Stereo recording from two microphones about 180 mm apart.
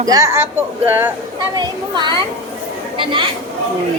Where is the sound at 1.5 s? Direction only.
25° right (ahead or behind).